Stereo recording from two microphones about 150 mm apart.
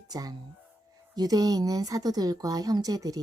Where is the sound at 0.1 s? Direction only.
25° right (ahead or behind).